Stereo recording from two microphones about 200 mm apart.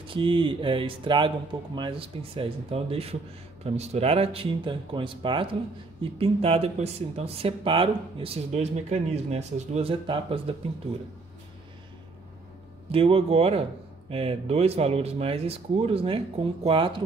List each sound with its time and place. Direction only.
0.0 s speech: 25° right (ahead or behind)
12.9 s speech: 30° right (ahead or behind)